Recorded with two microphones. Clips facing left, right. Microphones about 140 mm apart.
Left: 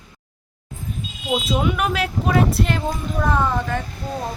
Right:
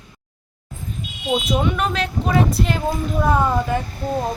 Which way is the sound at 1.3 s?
5° left (ahead or behind).